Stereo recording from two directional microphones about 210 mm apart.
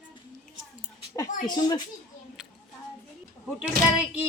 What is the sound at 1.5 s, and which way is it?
Speech, 20° left (ahead or behind).